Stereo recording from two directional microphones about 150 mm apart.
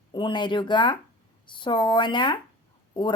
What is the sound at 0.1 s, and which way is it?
Speech, 30° left (ahead or behind).